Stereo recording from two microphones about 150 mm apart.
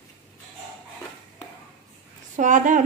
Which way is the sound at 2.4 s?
60° right (ahead or behind).